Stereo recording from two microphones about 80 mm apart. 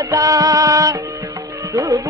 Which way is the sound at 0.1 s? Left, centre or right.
Right.